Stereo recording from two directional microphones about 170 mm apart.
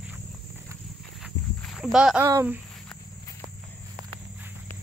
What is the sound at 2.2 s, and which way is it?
Speech, 20° right (ahead or behind).